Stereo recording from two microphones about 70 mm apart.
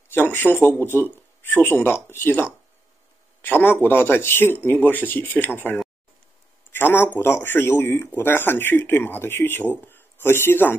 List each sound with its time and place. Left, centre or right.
0.1 s speech: left